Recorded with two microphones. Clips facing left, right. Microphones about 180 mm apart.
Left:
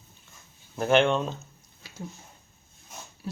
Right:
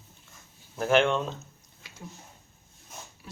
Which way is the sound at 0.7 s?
Centre (ahead or behind).